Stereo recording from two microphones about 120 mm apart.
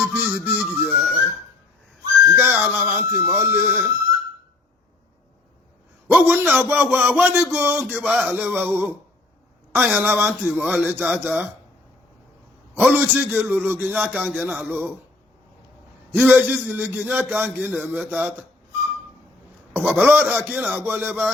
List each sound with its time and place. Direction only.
0.0 s music: 15° right (ahead or behind)
2.3 s whistling: 15° right (ahead or behind)
2.7 s a man's voice: 15° right (ahead or behind)
6.1 s a man's voice: 15° right (ahead or behind)
12.7 s a man's voice: 15° right (ahead or behind)
16.1 s a man's voice: 15° right (ahead or behind)
19.7 s a man's voice: 15° right (ahead or behind)